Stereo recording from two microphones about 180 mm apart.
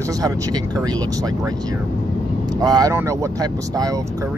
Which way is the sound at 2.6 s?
20° right (ahead or behind).